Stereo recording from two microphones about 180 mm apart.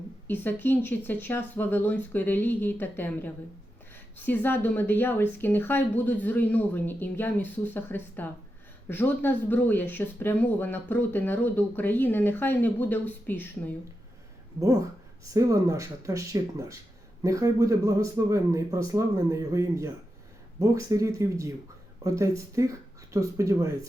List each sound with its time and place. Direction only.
0.3 s speech: 10° left (ahead or behind)
14.6 s a man's voice: 20° right (ahead or behind)